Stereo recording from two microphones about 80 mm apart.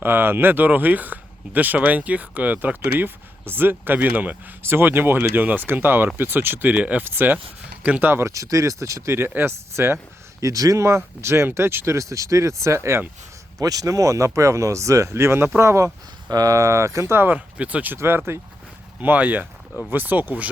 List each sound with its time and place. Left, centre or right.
0.0 s speech: right
8.1 s speech: right
10.4 s speech: right
13.6 s speech: right
16.3 s speech: right; by 17.9 s centre
17.9 s speech: right
18.9 s speech: centre